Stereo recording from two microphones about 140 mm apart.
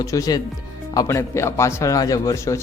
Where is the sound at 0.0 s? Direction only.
25° left (ahead or behind).